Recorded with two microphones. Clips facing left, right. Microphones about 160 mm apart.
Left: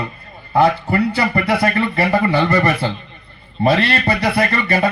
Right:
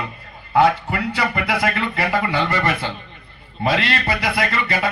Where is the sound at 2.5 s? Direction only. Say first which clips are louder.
Left 5 dB; 40° left (ahead or behind).